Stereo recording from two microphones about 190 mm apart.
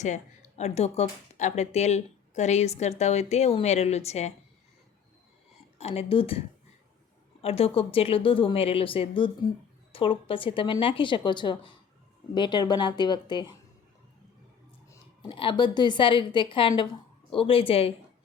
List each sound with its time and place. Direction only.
0.0 s speech: 35° left (ahead or behind)
5.8 s speech: 30° left (ahead or behind)
7.4 s a woman's voice: 30° left (ahead or behind)
14.8 s a woman's voice: 25° left (ahead or behind)